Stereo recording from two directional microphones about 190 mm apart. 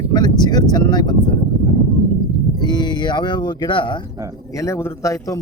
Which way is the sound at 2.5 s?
20° left (ahead or behind).